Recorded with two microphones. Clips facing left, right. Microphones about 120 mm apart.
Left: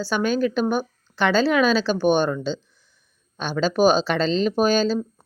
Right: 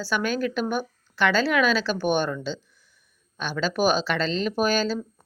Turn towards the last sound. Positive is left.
turn(degrees=25)  # may be behind; listen again after turning